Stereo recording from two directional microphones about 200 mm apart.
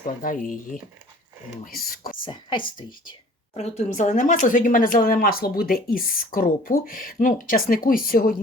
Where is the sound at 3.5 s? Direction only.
35° left (ahead or behind).